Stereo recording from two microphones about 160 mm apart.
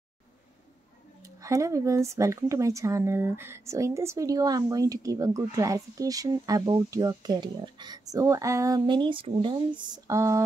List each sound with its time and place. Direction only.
1.2 s speech: 20° right (ahead or behind)